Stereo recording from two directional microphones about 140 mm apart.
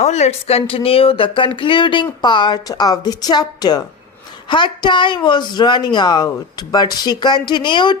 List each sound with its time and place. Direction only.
0.0 s speech: 50° left (ahead or behind); by 7.9 s 35° left (ahead or behind)